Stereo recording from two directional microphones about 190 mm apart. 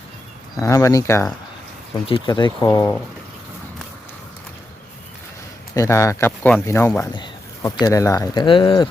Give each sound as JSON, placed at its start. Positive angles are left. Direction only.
{"t": 0.6, "sound": "a man's voice", "side_deg": 15}
{"t": 2.0, "sound": "speech", "side_deg": 25}
{"t": 5.7, "sound": "a man's voice", "side_deg": 15}